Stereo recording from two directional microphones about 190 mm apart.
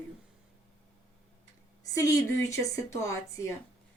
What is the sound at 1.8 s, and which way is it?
Speech, 20° left (ahead or behind).